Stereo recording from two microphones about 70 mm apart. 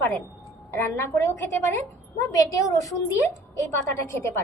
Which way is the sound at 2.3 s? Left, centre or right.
Left.